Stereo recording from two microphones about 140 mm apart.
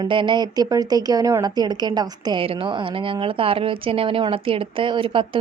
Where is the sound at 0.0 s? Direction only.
35° right (ahead or behind).